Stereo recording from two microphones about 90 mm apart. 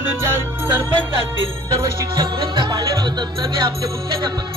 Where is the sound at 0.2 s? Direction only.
30° right (ahead or behind).